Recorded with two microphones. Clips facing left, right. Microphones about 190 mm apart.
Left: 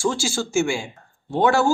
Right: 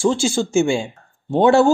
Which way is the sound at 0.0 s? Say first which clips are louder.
Right 6 dB; 25° right (ahead or behind).